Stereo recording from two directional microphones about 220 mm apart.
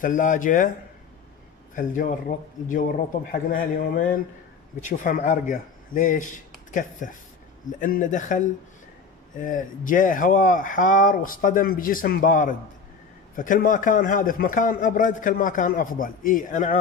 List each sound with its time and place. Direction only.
0.0 s a man's voice: 35° left (ahead or behind)
1.8 s a man's voice: 35° left (ahead or behind)